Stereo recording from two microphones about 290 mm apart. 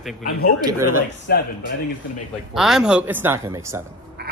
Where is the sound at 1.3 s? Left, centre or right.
Left.